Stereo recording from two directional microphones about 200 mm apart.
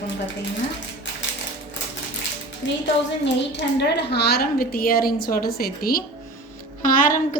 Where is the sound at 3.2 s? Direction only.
60° left (ahead or behind).